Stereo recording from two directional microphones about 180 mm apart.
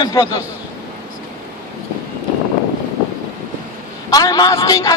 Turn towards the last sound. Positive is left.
turn(degrees=20)  # may be behind; listen again after turning